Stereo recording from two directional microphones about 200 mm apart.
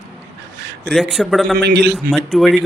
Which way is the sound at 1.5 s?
55° right (ahead or behind).